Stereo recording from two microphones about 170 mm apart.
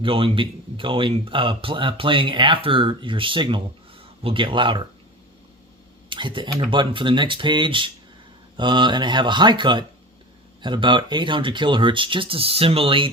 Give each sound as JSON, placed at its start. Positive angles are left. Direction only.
{"t": 0.0, "sound": "speech", "side_deg": -30}
{"t": 6.1, "sound": "speech", "side_deg": -30}